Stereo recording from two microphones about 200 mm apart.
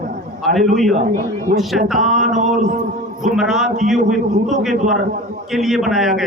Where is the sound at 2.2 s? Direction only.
40° right (ahead or behind).